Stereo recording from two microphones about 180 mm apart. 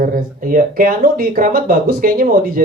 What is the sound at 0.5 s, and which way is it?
A woman's voice, 55° right (ahead or behind).